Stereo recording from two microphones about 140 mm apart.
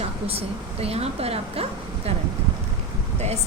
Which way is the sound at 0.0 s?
45° right (ahead or behind).